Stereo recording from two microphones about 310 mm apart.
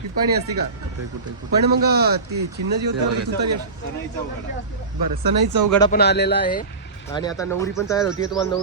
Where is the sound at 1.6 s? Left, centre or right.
Right.